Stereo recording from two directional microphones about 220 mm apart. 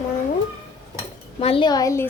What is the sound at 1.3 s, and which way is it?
Speech, 25° left (ahead or behind).